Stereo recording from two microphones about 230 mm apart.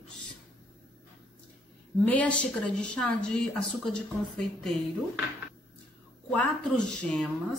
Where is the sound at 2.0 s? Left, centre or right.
Centre.